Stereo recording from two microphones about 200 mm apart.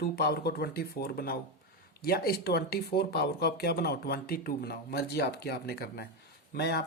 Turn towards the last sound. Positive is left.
turn(degrees=55)  # may be behind; listen again after turning